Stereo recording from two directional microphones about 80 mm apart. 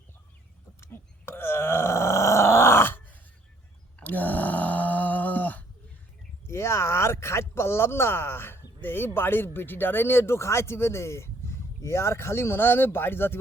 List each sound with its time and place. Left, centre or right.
0.8 s groan: left
3.9 s a sound: left
6.5 s speech: left